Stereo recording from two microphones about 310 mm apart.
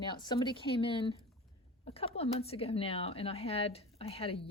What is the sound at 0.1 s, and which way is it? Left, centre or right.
Speech, centre.